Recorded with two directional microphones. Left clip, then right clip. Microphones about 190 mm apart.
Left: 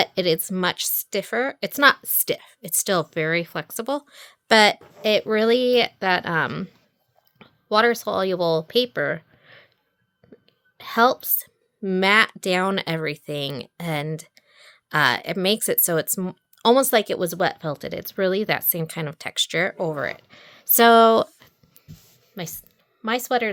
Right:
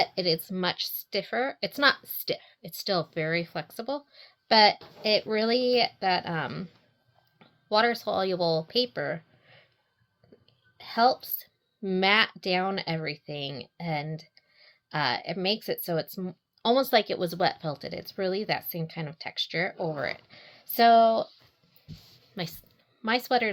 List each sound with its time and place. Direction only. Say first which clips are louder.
0.0 s speech: left 5 dB; 55° left (ahead or behind)
10.8 s speech: left 5 dB; 50° left (ahead or behind)
19.9 s speech: left 5 dB; 30° left (ahead or behind); by 21.2 s 60° left (ahead or behind)
22.4 s speech: left 2 dB; 20° left (ahead or behind)